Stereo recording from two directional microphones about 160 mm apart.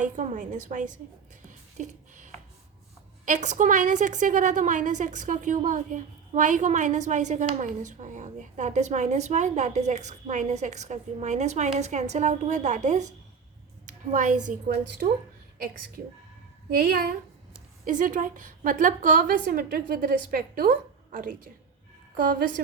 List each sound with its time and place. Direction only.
0.0 s a woman's voice: 50° right (ahead or behind)
1.5 s a sound: 50° right (ahead or behind)
3.2 s a woman's voice: 50° right (ahead or behind)
16.6 s a woman's voice: 65° right (ahead or behind)
19.5 s a woman's voice: 70° right (ahead or behind)